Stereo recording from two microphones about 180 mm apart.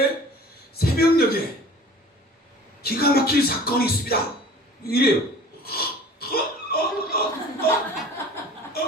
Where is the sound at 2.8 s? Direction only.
60° left (ahead or behind).